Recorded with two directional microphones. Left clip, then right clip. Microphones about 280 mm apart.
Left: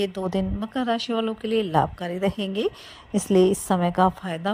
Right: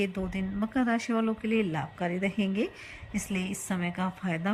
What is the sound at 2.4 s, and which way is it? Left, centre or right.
Speech, centre.